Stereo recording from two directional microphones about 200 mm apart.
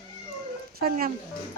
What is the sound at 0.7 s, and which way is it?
Speech, 45° right (ahead or behind).